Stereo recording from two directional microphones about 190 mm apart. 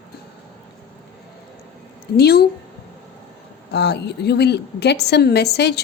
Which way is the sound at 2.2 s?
55° left (ahead or behind).